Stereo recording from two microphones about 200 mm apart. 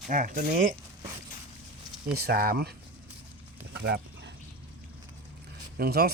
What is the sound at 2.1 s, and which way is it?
Speech, 50° right (ahead or behind).